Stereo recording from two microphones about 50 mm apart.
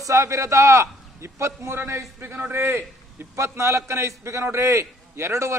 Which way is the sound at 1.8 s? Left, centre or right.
Right.